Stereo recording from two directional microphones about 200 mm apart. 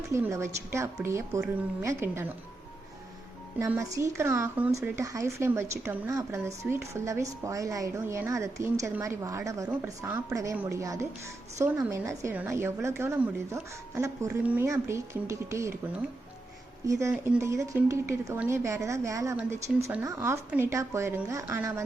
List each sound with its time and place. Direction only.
0.1 s a woman's voice: 15° right (ahead or behind)
3.6 s a woman's voice: 15° right (ahead or behind)
16.8 s a woman's voice: 15° right (ahead or behind)